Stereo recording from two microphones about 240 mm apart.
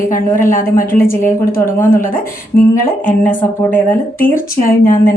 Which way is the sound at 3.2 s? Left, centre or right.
Centre.